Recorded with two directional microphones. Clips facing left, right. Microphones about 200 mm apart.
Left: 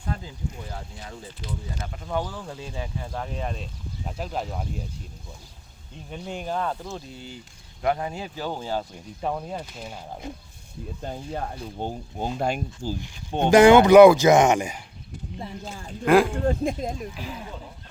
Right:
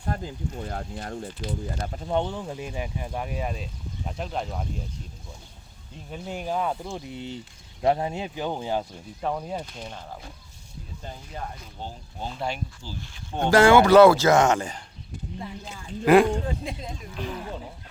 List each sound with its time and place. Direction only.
0.1 s speech: 55° right (ahead or behind)
1.9 s speech: 30° right (ahead or behind); by 4.6 s 5° left (ahead or behind)
6.1 s speech: 5° right (ahead or behind)
9.2 s speech: 5° left (ahead or behind)
10.1 s speech: 20° left (ahead or behind)
11.0 s speech: 50° left (ahead or behind)
13.0 s speech: 20° left (ahead or behind)
16.0 s speech: centre (ahead or behind)
16.5 s speech: 45° left (ahead or behind)